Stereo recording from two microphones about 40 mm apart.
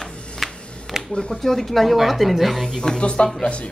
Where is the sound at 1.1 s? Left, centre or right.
Left.